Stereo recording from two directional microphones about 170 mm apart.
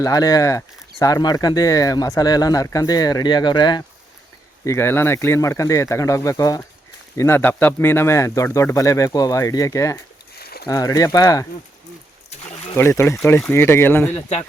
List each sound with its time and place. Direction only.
0.0 s speech: 20° left (ahead or behind)
4.6 s speech: 15° left (ahead or behind)
10.3 s a sound: 65° left (ahead or behind)
10.7 s speech: 20° left (ahead or behind)
12.7 s speech: 15° left (ahead or behind)
14.1 s speech: 35° left (ahead or behind)